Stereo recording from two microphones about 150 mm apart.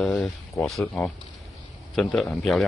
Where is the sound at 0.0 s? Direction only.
5° left (ahead or behind).